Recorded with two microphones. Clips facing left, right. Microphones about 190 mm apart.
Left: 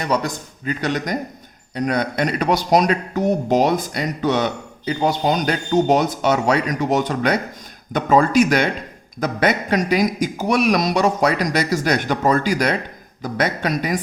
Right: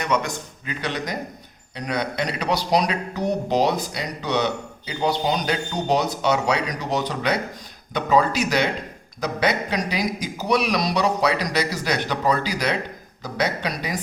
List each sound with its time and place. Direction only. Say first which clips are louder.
0.0 s a man's voice: left 2 dB; 35° left (ahead or behind)